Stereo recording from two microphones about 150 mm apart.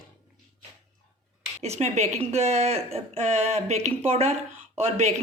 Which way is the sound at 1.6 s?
45° right (ahead or behind).